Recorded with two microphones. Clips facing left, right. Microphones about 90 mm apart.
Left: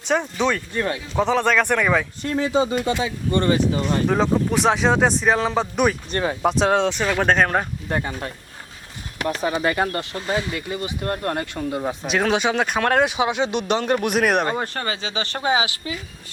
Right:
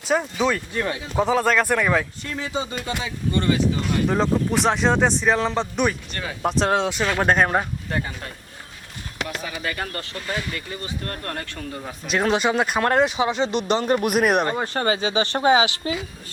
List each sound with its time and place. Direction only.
0.1 s speech: 5° right (ahead or behind)
2.2 s speech: 35° left (ahead or behind)
4.0 s speech: centre (ahead or behind)
6.1 s speech: 35° left (ahead or behind)
6.4 s speech: centre (ahead or behind)
7.9 s speech: 30° left (ahead or behind)
12.0 s speech: centre (ahead or behind)
14.9 s speech: 20° right (ahead or behind)
15.4 s speech: 35° right (ahead or behind)